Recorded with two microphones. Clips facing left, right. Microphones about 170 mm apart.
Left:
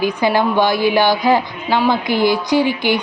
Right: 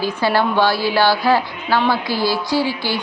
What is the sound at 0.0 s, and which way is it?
A woman's voice, 15° left (ahead or behind).